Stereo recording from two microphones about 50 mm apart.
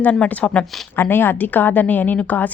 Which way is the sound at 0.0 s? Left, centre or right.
Left.